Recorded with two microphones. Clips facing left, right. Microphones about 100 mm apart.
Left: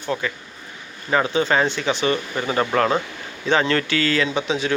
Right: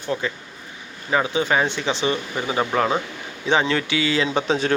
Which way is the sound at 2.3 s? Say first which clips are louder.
Left 1 dB; 10° right (ahead or behind).